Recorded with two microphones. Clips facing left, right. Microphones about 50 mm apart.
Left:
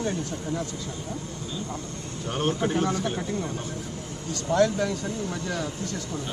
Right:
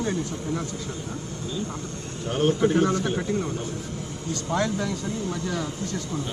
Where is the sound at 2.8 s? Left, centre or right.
Right.